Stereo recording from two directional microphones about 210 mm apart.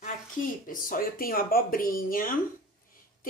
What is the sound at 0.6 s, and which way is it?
Speech, 40° left (ahead or behind).